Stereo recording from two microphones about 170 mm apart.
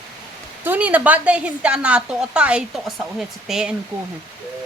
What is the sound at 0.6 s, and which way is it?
A woman's voice, 10° right (ahead or behind).